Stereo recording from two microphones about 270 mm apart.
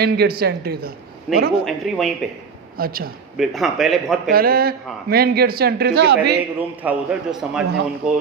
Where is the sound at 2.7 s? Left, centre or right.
Right.